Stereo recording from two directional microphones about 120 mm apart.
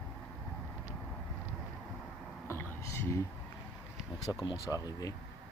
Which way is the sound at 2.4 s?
20° left (ahead or behind).